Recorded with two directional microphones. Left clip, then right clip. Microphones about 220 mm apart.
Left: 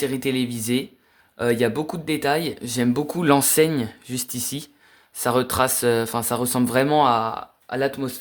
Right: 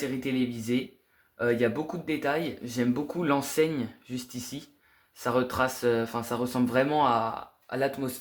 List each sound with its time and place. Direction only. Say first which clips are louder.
0.0 s speech: left 7 dB; 35° left (ahead or behind); by 8.2 s 20° left (ahead or behind)